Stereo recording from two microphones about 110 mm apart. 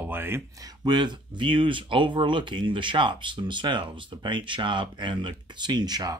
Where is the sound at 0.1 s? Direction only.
20° right (ahead or behind).